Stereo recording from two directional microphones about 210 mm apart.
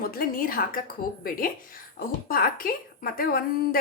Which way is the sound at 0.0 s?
45° left (ahead or behind).